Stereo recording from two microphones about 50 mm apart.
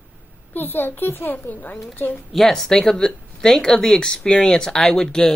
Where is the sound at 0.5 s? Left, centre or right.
Left.